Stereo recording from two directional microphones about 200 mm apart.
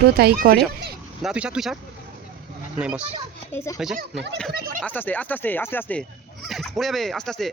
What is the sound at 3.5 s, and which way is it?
Speech, 15° left (ahead or behind).